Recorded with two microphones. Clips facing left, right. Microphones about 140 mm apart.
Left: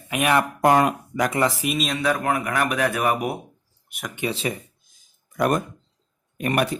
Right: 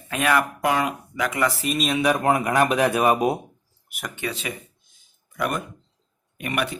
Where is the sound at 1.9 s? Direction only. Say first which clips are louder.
Right 5 dB; 20° right (ahead or behind).